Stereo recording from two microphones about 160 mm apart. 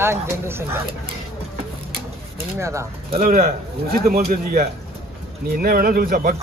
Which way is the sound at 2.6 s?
20° right (ahead or behind).